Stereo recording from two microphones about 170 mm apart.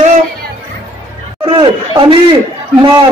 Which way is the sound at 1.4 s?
30° right (ahead or behind).